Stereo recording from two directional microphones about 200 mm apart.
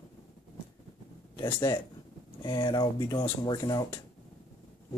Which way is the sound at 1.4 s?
20° left (ahead or behind).